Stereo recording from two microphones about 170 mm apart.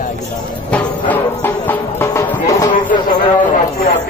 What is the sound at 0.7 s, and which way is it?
Music, 10° left (ahead or behind).